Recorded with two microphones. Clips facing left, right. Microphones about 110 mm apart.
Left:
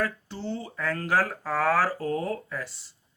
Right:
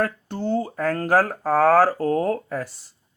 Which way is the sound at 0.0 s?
50° right (ahead or behind).